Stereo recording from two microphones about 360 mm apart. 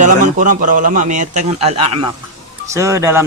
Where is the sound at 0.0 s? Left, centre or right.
Right.